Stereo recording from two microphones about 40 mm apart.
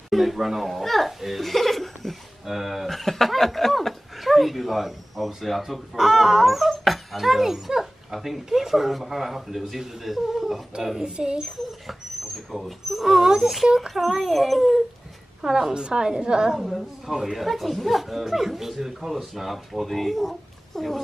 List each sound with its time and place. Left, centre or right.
0.1 s speech: centre
1.2 s chuckle: centre
2.4 s speech: centre
11.1 s a woman's voice: right
12.4 s speech: centre
15.7 s a woman's voice: right
17.1 s speech: centre